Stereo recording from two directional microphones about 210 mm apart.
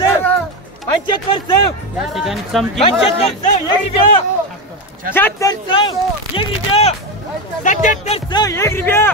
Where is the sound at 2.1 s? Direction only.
Centre (ahead or behind).